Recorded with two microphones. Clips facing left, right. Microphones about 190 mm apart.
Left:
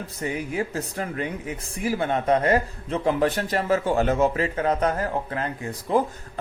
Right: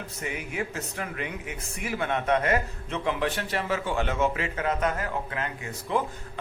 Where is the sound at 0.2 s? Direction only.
35° left (ahead or behind).